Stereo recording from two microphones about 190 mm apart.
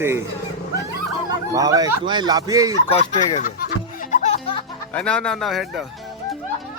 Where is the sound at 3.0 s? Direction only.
30° left (ahead or behind).